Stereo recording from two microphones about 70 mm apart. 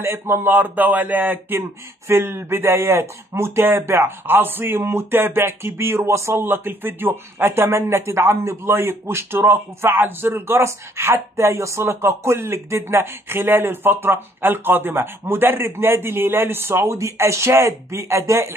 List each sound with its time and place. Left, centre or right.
0.0 s speech: right
2.0 s speech: right